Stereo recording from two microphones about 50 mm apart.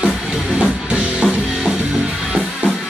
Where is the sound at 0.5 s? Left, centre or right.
Centre.